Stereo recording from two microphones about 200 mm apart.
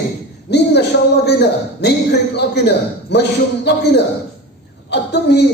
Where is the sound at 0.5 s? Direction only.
55° left (ahead or behind).